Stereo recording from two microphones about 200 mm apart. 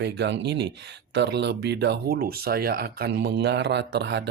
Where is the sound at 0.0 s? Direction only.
60° right (ahead or behind).